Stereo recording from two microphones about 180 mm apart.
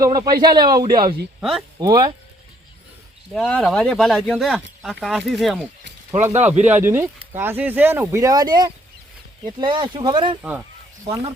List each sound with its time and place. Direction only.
0.0 s speech: 20° right (ahead or behind)
1.4 s speech: 5° right (ahead or behind)
1.8 s speech: 20° right (ahead or behind)
3.3 s speech: centre (ahead or behind); by 10.3 s 25° right (ahead or behind)
10.4 s speech: 5° right (ahead or behind)